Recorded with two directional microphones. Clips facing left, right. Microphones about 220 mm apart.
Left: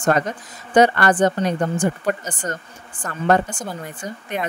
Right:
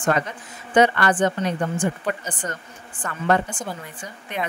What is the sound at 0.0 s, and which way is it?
A woman's voice, 40° left (ahead or behind).